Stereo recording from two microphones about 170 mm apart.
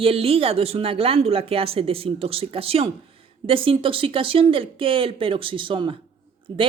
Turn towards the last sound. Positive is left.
turn(degrees=-30)  # may be behind; listen again after turning